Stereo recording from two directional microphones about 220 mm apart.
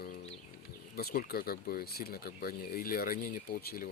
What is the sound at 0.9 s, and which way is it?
Speech, 45° left (ahead or behind).